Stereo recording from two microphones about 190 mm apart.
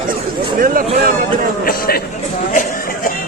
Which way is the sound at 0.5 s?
50° right (ahead or behind).